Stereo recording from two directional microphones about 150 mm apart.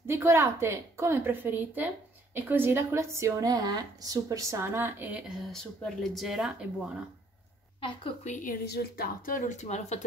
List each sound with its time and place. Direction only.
0.0 s a woman's voice: 15° right (ahead or behind)
5.4 s speech: 5° left (ahead or behind)
7.8 s a woman's voice: 35° left (ahead or behind)
8.3 s a woman's voice: 65° left (ahead or behind); by 9.9 s 50° left (ahead or behind)